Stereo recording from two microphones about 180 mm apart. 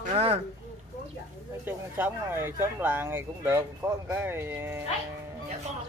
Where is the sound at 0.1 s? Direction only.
35° right (ahead or behind).